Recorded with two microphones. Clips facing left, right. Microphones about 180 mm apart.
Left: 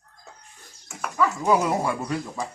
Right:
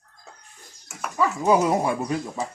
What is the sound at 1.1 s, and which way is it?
Speech, 20° right (ahead or behind).